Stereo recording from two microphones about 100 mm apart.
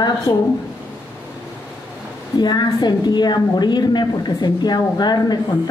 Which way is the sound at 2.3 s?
45° left (ahead or behind).